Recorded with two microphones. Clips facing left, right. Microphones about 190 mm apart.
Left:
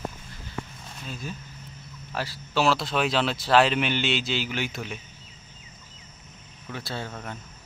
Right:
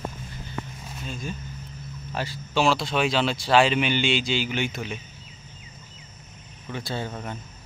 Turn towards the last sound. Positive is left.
turn(degrees=-5)  # may be behind; listen again after turning